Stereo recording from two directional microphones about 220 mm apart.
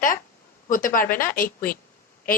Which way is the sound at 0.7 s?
40° left (ahead or behind).